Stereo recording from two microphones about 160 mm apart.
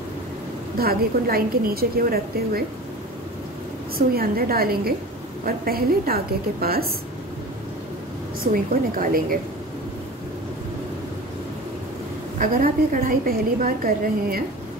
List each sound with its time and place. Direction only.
0.7 s a woman's voice: 70° right (ahead or behind)
4.1 s a woman's voice: 70° right (ahead or behind)
8.9 s a woman's voice: 60° right (ahead or behind)
12.4 s a woman's voice: 60° right (ahead or behind)